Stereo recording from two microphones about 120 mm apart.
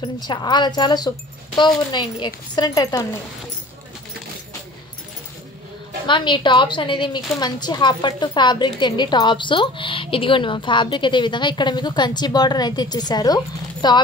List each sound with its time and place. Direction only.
0.0 s a woman's voice: 40° left (ahead or behind)
2.9 s speech: 20° left (ahead or behind)
6.0 s a woman's voice: 40° left (ahead or behind)